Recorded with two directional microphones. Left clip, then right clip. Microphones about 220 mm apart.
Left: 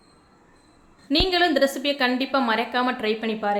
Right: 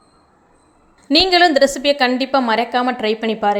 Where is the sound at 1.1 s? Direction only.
30° right (ahead or behind).